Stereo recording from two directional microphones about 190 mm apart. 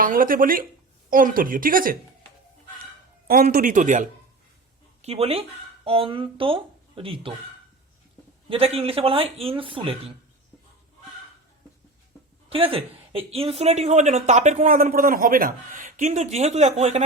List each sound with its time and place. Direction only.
0.0 s a woman's voice: 45° right (ahead or behind)
3.5 s a woman's voice: 45° right (ahead or behind)
5.0 s speech: 30° right (ahead or behind)
8.4 s speech: 30° right (ahead or behind)
12.5 s speech: 30° right (ahead or behind)